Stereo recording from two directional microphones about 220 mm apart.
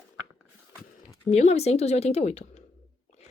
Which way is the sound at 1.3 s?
30° left (ahead or behind).